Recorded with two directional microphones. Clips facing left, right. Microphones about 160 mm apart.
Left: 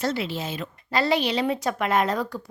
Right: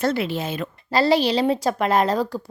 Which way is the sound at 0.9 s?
35° right (ahead or behind).